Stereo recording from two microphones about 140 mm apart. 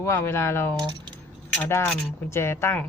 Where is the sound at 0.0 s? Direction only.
20° left (ahead or behind).